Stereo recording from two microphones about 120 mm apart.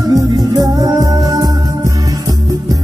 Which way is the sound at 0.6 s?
30° right (ahead or behind).